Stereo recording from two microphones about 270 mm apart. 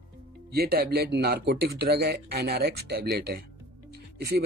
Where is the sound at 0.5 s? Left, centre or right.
Right.